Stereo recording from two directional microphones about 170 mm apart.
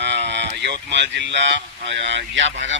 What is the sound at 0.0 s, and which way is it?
Speech, 85° right.